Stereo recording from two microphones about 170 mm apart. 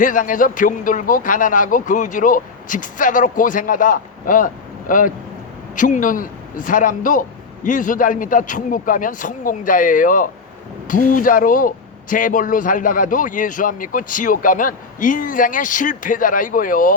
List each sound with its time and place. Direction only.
0.0 s speech: 50° left (ahead or behind)